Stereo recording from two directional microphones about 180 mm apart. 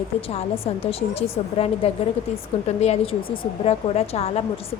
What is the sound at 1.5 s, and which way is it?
A woman's voice, 35° left (ahead or behind).